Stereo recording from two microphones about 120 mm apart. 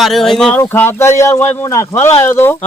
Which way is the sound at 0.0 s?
Centre (ahead or behind).